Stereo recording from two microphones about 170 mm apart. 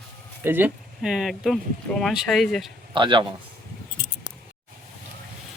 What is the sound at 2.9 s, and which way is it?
Speech, 30° right (ahead or behind).